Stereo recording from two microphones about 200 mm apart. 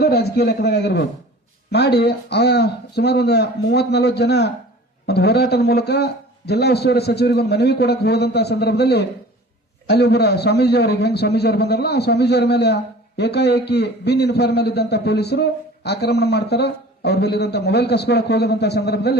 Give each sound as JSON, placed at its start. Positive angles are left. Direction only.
{"t": 0.0, "sound": "a man's voice", "side_deg": 55}